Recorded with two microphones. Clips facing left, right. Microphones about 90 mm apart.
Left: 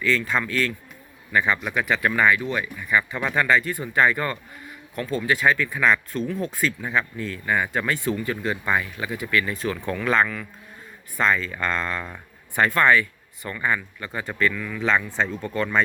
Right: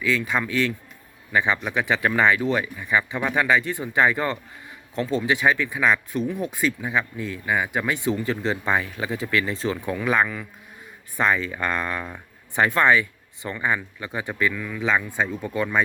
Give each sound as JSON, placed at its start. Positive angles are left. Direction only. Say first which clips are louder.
{"t": 0.0, "sound": "speech", "louder": "even", "side_deg": -15}